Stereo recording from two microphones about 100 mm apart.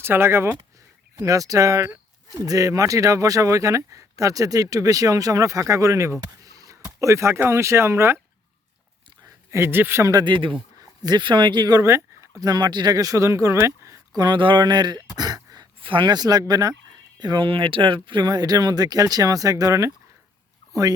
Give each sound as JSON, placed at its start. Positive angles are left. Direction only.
{"t": 0.0, "sound": "speech", "side_deg": -25}
{"t": 1.1, "sound": "speech", "side_deg": -35}
{"t": 9.5, "sound": "speech", "side_deg": -25}
{"t": 10.1, "sound": "speech", "side_deg": -45}
{"t": 10.8, "sound": "speech", "side_deg": -40}
{"t": 11.8, "sound": "speech", "side_deg": -30}
{"t": 14.2, "sound": "speech", "side_deg": -50}
{"t": 15.8, "sound": "speech", "side_deg": -55}